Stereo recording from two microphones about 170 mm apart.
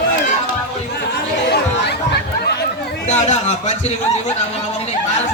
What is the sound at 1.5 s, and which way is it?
Chatter, 75° left (ahead or behind).